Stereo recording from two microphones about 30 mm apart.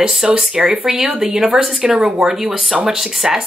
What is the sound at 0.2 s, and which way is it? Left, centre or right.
Speech, centre.